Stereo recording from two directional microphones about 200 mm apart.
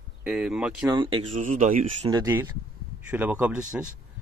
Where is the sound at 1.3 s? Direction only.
40° right (ahead or behind).